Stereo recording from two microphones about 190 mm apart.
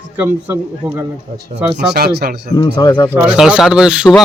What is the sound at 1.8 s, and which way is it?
Speech, 55° right (ahead or behind).